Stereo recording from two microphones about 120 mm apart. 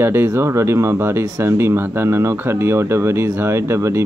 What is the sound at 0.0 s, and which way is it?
Speech, 20° right (ahead or behind).